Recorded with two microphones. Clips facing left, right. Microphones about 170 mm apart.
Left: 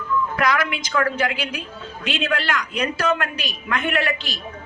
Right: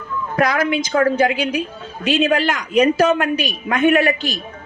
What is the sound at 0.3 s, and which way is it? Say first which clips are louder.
A man's voice: right 9 dB; 45° right (ahead or behind).